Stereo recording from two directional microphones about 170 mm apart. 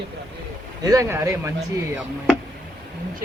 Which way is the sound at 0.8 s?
20° right (ahead or behind).